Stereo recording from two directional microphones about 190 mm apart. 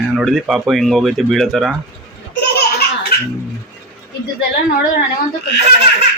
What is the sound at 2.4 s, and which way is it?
Laughter, 55° left (ahead or behind).